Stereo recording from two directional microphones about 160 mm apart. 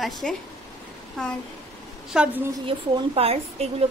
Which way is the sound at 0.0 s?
Centre (ahead or behind).